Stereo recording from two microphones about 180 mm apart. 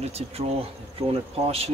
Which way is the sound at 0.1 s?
35° right (ahead or behind).